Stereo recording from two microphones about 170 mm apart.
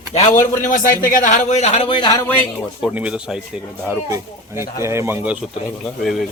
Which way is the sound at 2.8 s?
5° right (ahead or behind).